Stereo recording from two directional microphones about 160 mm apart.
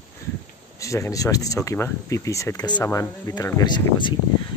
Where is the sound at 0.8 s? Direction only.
20° left (ahead or behind).